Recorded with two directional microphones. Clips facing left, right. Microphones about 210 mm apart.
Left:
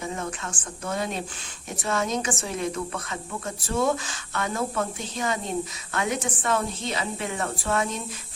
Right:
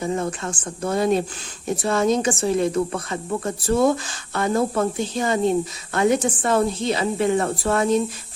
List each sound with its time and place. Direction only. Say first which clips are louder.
0.0 s speech: right 7 dB; 35° right (ahead or behind)